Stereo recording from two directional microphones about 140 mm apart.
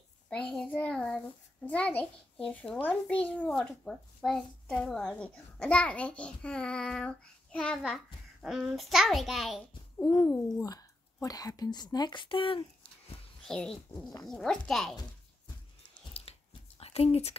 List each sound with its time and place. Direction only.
0.3 s a child's voice: 5° left (ahead or behind)
10.1 s speech: 20° left (ahead or behind); by 12.6 s 40° left (ahead or behind)
13.4 s a child's voice: 5° left (ahead or behind)
16.1 s a sound: 45° left (ahead or behind)